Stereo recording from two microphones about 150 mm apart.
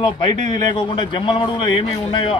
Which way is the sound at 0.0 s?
30° left (ahead or behind).